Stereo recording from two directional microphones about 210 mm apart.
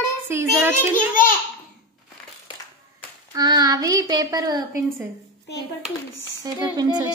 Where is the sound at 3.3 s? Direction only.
20° right (ahead or behind).